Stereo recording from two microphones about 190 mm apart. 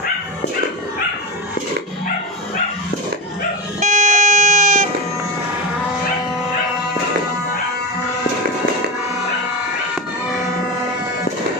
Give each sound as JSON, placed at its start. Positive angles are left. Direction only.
{"t": 3.8, "sound": "vehicle", "side_deg": -40}